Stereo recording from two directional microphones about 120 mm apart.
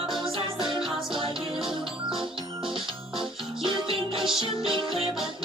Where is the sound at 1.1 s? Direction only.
45° right (ahead or behind).